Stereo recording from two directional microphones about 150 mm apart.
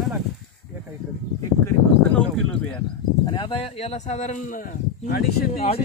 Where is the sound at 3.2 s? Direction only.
35° left (ahead or behind); by 5.6 s 90° left.